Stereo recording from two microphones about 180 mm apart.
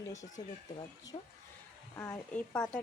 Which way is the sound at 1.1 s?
30° left (ahead or behind).